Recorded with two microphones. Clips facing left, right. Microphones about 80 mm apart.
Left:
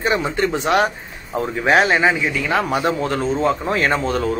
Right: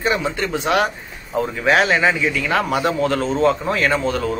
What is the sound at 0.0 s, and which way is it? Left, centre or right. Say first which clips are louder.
Speech: left 2 dB; left.